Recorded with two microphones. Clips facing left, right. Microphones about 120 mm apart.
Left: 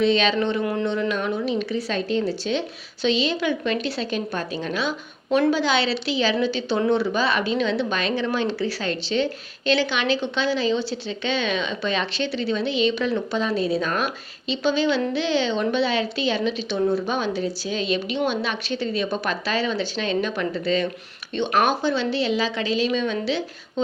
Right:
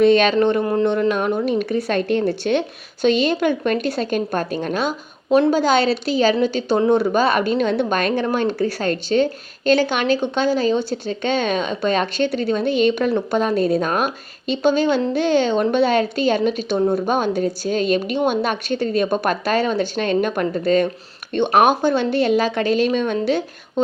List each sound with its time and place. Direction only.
0.0 s a woman's voice: 50° right (ahead or behind)
0.6 s a sound: 40° right (ahead or behind)
1.1 s a woman's voice: 50° right (ahead or behind)